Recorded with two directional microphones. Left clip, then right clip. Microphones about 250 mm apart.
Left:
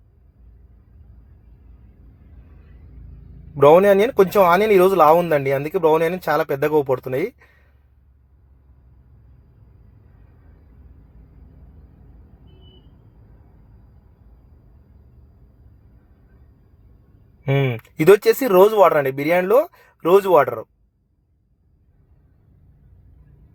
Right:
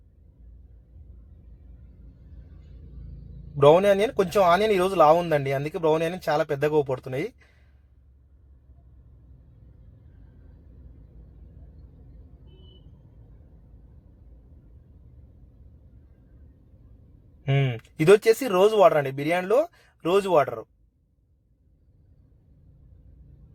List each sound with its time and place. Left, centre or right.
3.6 s speech: left
17.5 s a sound: centre
18.2 s speech: left